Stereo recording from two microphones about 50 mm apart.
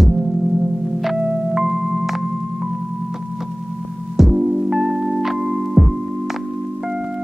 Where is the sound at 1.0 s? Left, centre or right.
Centre.